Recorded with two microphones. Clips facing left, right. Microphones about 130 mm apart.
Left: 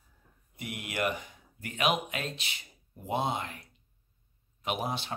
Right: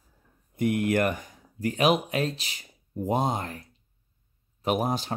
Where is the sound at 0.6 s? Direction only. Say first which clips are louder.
Right 11 dB; 50° right (ahead or behind).